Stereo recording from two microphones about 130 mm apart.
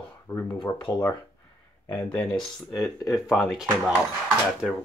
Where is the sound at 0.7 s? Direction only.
20° left (ahead or behind).